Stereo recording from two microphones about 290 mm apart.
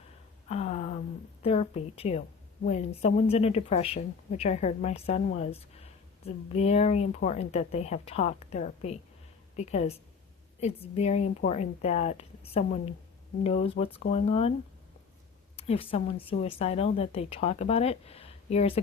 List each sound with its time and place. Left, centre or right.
0.4 s a sound: left
1.4 s a woman's voice: left
15.5 s a woman's voice: centre